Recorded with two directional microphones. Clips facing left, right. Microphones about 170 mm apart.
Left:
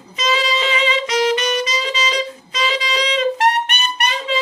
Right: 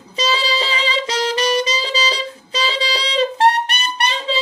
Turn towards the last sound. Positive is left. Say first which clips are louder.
# even
turn(degrees=-30)  # may be behind; listen again after turning